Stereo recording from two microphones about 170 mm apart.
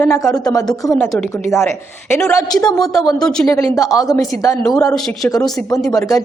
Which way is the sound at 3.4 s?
15° left (ahead or behind).